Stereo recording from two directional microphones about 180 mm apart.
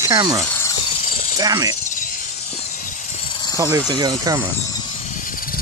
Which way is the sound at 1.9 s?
45° left (ahead or behind).